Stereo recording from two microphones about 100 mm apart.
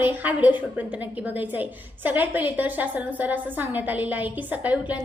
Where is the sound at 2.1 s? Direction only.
20° right (ahead or behind).